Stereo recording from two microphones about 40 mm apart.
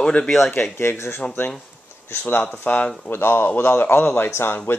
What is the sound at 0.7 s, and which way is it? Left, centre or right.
Speech, left.